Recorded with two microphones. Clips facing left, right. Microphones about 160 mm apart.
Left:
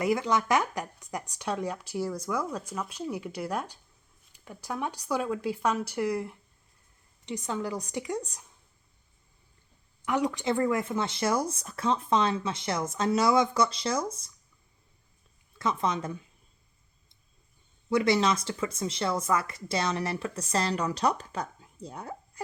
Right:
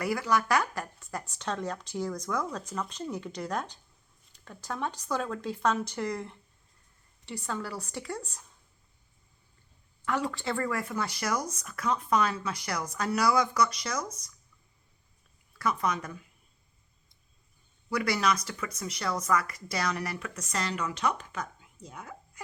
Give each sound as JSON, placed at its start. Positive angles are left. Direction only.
{"t": 0.0, "sound": "speech", "side_deg": 20}
{"t": 10.1, "sound": "speech", "side_deg": 15}
{"t": 15.5, "sound": "speech", "side_deg": 25}
{"t": 17.8, "sound": "speech", "side_deg": 25}